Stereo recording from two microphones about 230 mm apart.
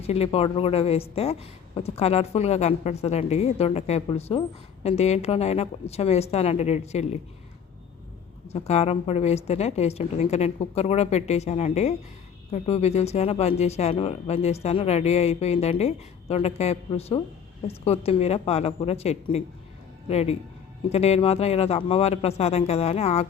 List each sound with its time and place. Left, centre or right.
0.0 s a woman's voice: left
8.5 s a woman's voice: left